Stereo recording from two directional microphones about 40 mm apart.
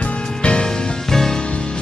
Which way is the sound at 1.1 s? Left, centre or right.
Centre.